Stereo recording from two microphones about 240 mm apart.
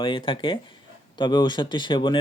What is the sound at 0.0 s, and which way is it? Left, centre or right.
Speech, left.